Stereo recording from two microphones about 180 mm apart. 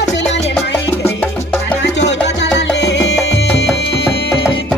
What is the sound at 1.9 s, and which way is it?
Music, 80° left.